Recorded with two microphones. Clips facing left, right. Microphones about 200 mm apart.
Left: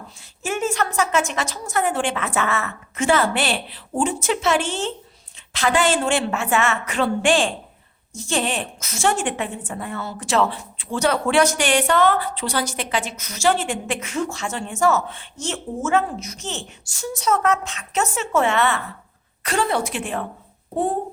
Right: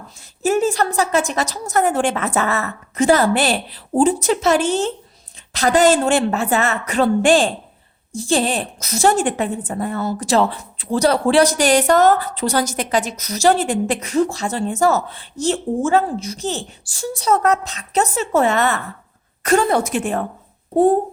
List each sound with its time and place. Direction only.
0.2 s a woman's voice: 40° right (ahead or behind)